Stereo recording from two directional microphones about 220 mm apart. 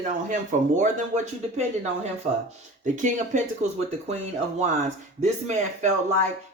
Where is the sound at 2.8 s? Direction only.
35° right (ahead or behind).